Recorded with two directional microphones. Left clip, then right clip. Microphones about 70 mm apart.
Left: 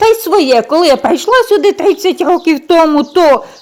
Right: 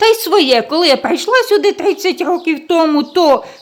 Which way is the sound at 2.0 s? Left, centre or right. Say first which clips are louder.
Left 4 dB; left.